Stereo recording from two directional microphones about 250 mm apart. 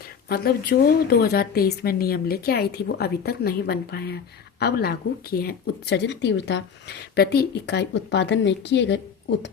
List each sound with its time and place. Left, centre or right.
0.3 s speech: left